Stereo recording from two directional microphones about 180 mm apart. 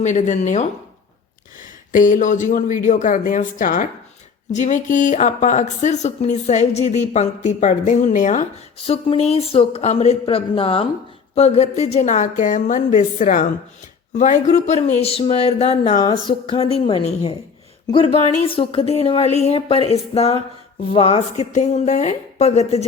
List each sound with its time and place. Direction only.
0.0 s speech: 40° left (ahead or behind)
1.9 s a woman's voice: 45° left (ahead or behind)
16.0 s a woman's voice: 20° left (ahead or behind)